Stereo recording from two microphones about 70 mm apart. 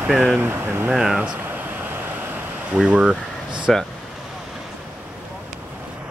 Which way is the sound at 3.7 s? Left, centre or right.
Centre.